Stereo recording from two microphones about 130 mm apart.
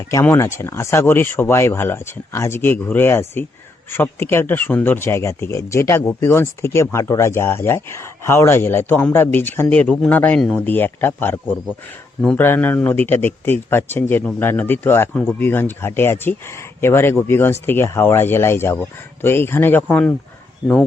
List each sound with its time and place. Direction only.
0.1 s a man's voice: 20° left (ahead or behind)